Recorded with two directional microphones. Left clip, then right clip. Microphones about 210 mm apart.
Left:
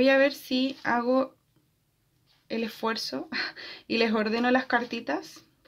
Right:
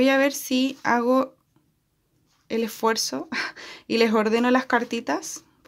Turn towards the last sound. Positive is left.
turn(degrees=-25)  # may be behind; listen again after turning